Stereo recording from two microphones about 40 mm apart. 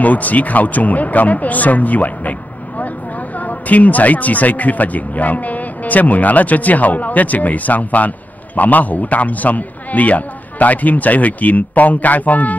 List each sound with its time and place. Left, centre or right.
0.0 s speech: left
3.3 s speech: left